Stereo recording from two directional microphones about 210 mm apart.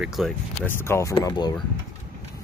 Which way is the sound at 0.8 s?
15° left (ahead or behind).